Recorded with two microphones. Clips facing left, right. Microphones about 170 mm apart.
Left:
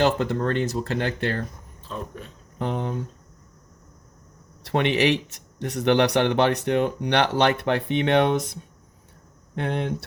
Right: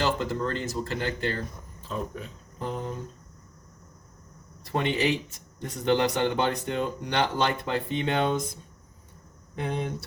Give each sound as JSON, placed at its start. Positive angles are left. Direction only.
{"t": 0.0, "sound": "speech", "side_deg": 65}
{"t": 1.9, "sound": "speech", "side_deg": 0}
{"t": 2.6, "sound": "speech", "side_deg": 75}
{"t": 4.6, "sound": "speech", "side_deg": 75}
{"t": 9.6, "sound": "speech", "side_deg": 70}